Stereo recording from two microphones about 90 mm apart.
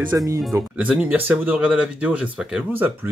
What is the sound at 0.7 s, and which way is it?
Speech, 15° right (ahead or behind).